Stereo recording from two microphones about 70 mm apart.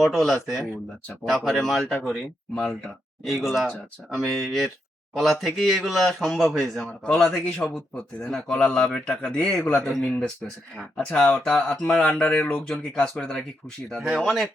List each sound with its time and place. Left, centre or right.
0.0 s a man's voice: centre
7.3 s a man's voice: left
10.9 s speech: centre
14.0 s a man's voice: centre